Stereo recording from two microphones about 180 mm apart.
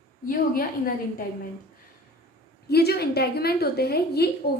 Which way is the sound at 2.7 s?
60° left (ahead or behind).